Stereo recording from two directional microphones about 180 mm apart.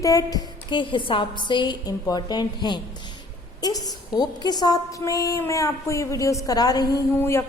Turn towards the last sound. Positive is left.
turn(degrees=15)  # may be behind; listen again after turning